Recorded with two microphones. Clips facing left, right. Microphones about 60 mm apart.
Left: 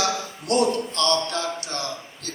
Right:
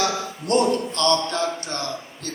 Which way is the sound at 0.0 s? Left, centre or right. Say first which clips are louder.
Right 1 dB; right.